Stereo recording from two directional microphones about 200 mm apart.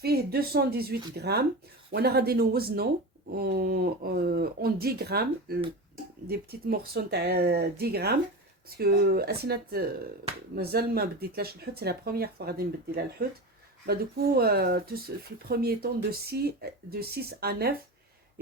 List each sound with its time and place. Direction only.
0.0 s speech: 50° right (ahead or behind)